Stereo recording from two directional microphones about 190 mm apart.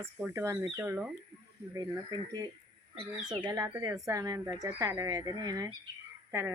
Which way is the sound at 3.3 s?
20° right (ahead or behind).